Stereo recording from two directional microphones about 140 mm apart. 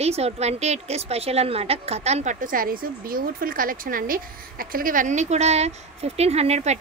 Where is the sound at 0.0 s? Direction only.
50° right (ahead or behind).